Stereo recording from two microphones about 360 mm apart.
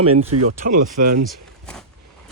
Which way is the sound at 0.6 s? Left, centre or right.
Right.